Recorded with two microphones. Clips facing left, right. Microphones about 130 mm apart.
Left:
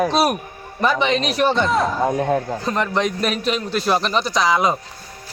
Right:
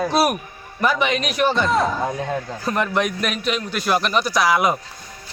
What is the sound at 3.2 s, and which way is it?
A man's voice, 35° left (ahead or behind).